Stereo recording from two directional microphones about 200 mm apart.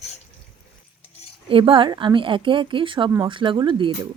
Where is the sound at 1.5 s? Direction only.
25° right (ahead or behind).